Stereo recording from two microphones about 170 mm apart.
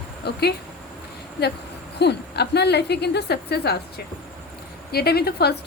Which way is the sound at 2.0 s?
75° left (ahead or behind).